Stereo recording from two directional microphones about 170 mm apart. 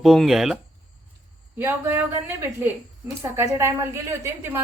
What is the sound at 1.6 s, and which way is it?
A woman's voice, 10° right (ahead or behind).